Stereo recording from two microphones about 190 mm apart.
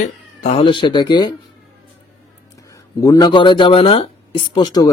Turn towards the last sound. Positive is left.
turn(degrees=20)  # may be behind; listen again after turning